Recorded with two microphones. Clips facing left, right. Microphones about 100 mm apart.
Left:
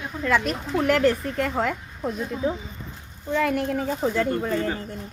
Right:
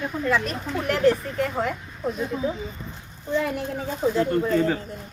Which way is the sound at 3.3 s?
65° left (ahead or behind).